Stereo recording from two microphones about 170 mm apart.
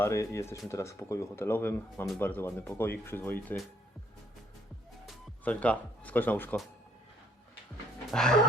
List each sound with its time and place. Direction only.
0.0 s speech: 15° left (ahead or behind)
5.4 s speech: 10° left (ahead or behind)
8.1 s speech: 5° left (ahead or behind)